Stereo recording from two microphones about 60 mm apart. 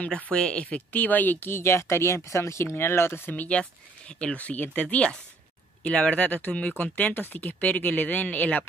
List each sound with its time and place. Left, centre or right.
0.0 s speech: left
2.6 s speech: left
3.3 s speech: left